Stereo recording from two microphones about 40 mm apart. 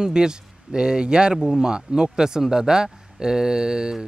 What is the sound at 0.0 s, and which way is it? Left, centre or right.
Speech, centre.